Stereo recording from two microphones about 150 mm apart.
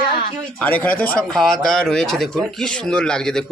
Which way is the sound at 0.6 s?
10° left (ahead or behind).